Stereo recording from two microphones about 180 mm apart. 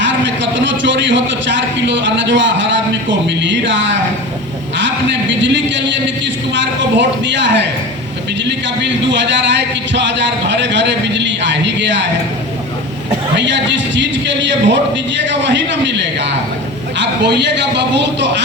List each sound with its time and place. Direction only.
0.5 s a man's voice: 90° right
5.3 s a man's voice: 85° right
9.1 s a man's voice: 75° right (ahead or behind)
13.3 s a man's voice: 80° right